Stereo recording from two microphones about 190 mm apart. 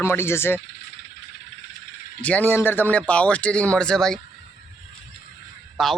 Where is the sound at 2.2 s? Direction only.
5° left (ahead or behind).